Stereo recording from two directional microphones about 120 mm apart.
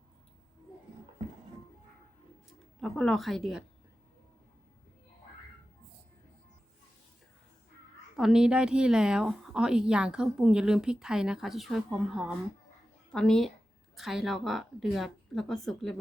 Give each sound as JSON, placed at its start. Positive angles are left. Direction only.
{"t": 2.8, "sound": "speech", "side_deg": 5}
{"t": 8.1, "sound": "speech", "side_deg": -5}